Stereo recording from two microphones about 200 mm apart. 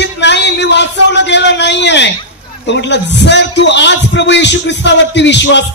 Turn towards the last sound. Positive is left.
turn(degrees=60)  # may be behind; listen again after turning